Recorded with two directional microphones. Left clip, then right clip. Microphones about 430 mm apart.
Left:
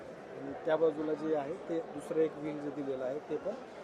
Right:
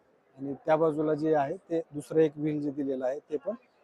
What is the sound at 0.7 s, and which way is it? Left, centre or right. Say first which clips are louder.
Speech: right 5 dB; right.